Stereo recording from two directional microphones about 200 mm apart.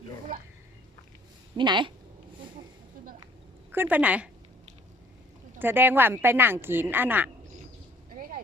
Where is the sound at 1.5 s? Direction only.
25° right (ahead or behind).